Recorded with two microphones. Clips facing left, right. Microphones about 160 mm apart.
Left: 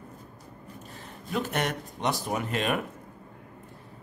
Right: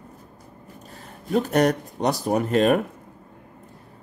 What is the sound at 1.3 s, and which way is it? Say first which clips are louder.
Speech: right 10 dB; 40° right (ahead or behind).